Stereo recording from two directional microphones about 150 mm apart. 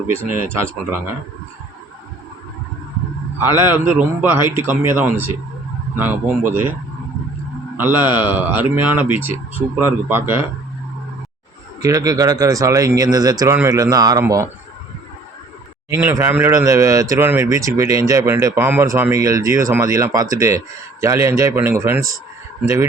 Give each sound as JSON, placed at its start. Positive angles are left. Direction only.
{"t": 0.3, "sound": "a man's voice", "side_deg": -15}
{"t": 3.3, "sound": "a man's voice", "side_deg": -15}
{"t": 7.8, "sound": "a man's voice", "side_deg": -10}
{"t": 11.8, "sound": "speech", "side_deg": -25}
{"t": 15.9, "sound": "speech", "side_deg": -15}